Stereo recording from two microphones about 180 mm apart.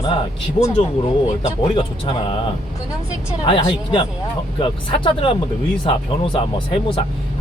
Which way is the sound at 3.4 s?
25° left (ahead or behind).